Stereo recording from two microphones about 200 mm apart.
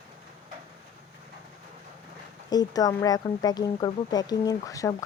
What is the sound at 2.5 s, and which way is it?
Speech, 20° left (ahead or behind).